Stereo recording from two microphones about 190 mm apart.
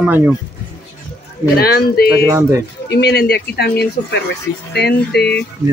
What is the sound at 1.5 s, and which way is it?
Speech, 55° left (ahead or behind).